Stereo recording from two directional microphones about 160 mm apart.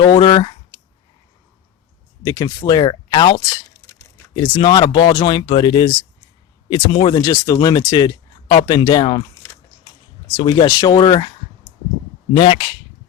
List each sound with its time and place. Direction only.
0.0 s speech: 30° left (ahead or behind)
2.2 s speech: 25° left (ahead or behind)
10.3 s speech: 30° left (ahead or behind)